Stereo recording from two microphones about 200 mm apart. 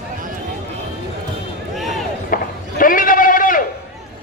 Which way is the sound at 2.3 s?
45° left (ahead or behind).